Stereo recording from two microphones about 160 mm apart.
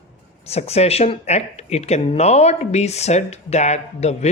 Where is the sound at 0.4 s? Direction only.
40° left (ahead or behind).